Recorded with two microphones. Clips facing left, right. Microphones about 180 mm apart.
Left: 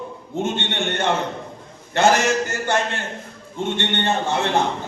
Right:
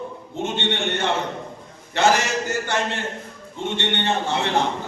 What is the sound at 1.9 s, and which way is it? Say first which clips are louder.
A man's voice: left 2 dB; 50° left (ahead or behind).